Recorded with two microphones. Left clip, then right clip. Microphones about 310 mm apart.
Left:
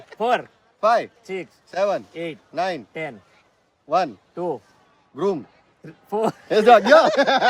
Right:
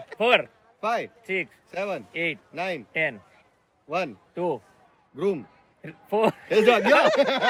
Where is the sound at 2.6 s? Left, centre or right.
Centre.